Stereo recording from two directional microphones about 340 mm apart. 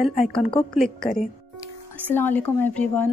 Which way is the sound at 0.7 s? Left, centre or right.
Centre.